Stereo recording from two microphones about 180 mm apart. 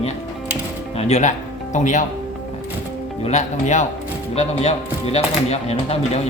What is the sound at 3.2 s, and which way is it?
Speech, 40° left (ahead or behind).